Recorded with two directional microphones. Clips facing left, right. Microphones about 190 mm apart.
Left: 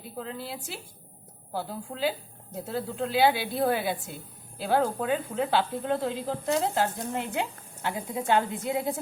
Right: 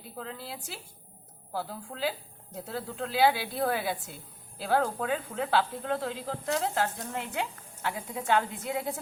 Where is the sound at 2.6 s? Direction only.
5° left (ahead or behind).